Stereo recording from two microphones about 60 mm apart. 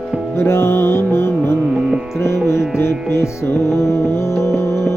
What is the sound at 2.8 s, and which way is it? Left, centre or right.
Music, left.